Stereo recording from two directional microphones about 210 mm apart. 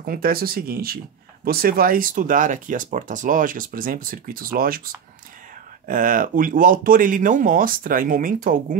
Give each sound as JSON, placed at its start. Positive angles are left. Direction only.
{"t": 0.0, "sound": "speech", "side_deg": -45}